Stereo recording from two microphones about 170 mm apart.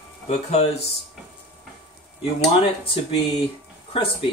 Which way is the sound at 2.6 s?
35° left (ahead or behind).